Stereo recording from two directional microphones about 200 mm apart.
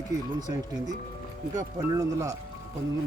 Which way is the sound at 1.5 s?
15° right (ahead or behind).